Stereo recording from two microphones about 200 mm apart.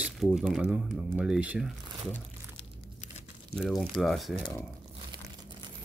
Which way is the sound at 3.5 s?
Centre (ahead or behind).